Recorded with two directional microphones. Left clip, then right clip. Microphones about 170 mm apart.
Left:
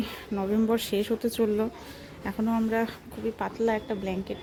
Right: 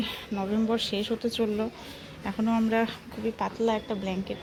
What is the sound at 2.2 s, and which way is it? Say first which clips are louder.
Speech: right 1 dB; 20° left (ahead or behind).